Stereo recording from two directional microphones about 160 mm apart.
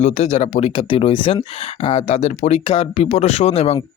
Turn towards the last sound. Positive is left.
turn(degrees=40)  # may be behind; listen again after turning